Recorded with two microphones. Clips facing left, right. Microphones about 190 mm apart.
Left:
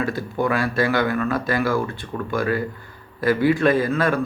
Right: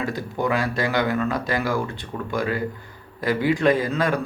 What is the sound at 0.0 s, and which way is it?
A man's voice, 15° right (ahead or behind).